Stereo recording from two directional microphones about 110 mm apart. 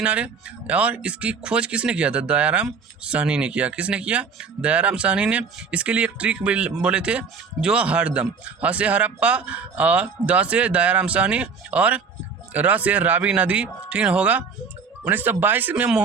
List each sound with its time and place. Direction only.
0.0 s speech: 10° right (ahead or behind)